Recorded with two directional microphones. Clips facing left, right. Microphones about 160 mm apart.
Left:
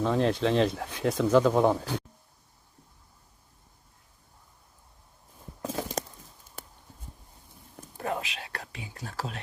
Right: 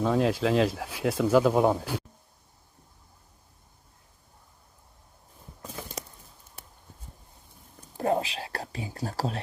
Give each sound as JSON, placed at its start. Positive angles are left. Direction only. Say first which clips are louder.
{"t": 0.0, "sound": "speech", "louder": "right 1 dB", "side_deg": -5}
{"t": 5.6, "sound": "a sound", "louder": "left 8 dB", "side_deg": 90}
{"t": 7.9, "sound": "whispering", "louder": "right 6 dB", "side_deg": -30}